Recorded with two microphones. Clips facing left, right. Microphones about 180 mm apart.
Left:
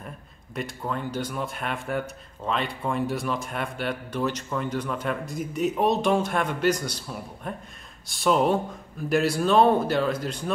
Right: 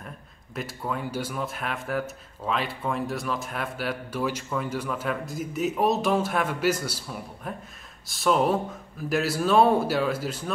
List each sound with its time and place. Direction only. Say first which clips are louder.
0.6 s speech: left 1 dB; 5° right (ahead or behind)